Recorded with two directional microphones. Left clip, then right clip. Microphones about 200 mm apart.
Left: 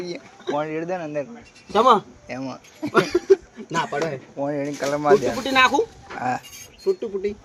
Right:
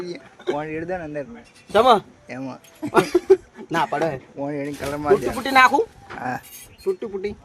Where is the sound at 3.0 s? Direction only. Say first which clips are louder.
Right 1 dB; 60° right (ahead or behind).